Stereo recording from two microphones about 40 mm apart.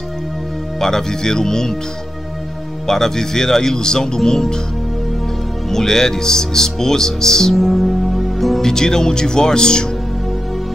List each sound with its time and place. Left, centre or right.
0.7 s speech: centre
2.9 s speech: centre
5.7 s speech: centre
7.5 s music: centre
8.6 s speech: centre